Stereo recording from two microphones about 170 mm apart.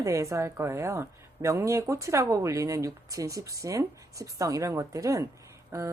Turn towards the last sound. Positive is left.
turn(degrees=-20)  # may be behind; listen again after turning